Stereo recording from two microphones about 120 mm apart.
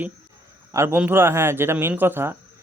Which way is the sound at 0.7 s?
20° right (ahead or behind).